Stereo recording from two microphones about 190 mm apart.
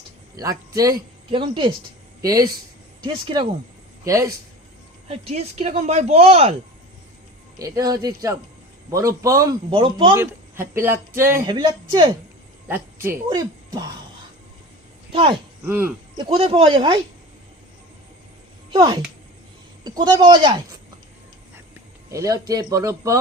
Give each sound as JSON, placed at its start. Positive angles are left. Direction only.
{"t": 0.3, "sound": "speech", "side_deg": -20}
{"t": 3.0, "sound": "speech", "side_deg": -25}
{"t": 5.0, "sound": "speech", "side_deg": -30}
{"t": 7.6, "sound": "speech", "side_deg": -20}
{"t": 10.2, "sound": "speech", "side_deg": -10}
{"t": 11.4, "sound": "speech", "side_deg": -25}
{"t": 12.6, "sound": "speech", "side_deg": -10}
{"t": 15.1, "sound": "speech", "side_deg": -30}
{"t": 15.6, "sound": "speech", "side_deg": -10}
{"t": 16.1, "sound": "speech", "side_deg": -30}
{"t": 18.7, "sound": "speech", "side_deg": -25}
{"t": 22.1, "sound": "speech", "side_deg": -15}